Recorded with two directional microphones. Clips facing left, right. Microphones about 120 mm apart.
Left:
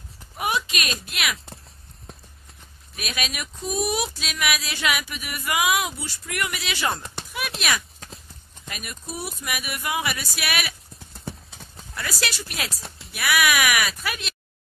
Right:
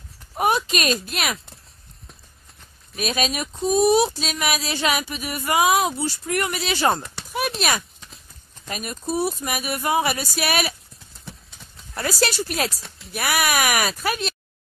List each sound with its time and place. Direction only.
0.4 s speech: 40° right (ahead or behind)
3.0 s speech: 35° right (ahead or behind)
11.9 s speech: 35° right (ahead or behind)